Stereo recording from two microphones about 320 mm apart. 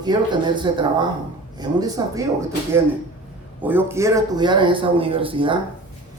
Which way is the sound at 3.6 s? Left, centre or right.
Centre.